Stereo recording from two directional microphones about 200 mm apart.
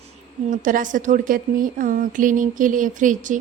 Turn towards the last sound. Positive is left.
turn(degrees=-40)  # may be behind; listen again after turning